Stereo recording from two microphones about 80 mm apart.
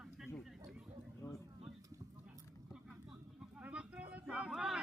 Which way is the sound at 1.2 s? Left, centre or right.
Left.